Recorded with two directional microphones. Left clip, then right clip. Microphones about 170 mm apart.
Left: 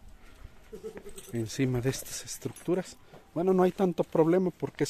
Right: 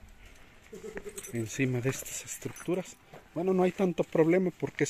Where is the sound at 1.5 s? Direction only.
20° left (ahead or behind).